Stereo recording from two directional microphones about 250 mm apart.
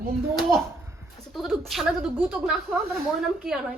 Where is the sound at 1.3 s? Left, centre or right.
Centre.